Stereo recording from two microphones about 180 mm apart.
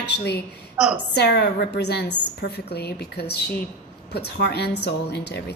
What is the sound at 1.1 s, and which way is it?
A woman's voice, 65° left (ahead or behind).